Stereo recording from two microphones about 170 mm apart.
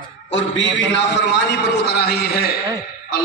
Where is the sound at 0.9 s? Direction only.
90° left; by 2.6 s 65° left (ahead or behind).